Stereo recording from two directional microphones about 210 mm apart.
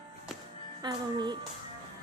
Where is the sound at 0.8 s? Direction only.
20° right (ahead or behind).